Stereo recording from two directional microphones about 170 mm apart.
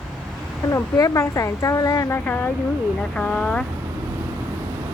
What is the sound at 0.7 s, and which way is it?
A woman's voice, 20° left (ahead or behind).